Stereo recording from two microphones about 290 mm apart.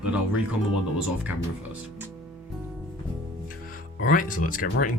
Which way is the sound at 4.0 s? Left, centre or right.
Left.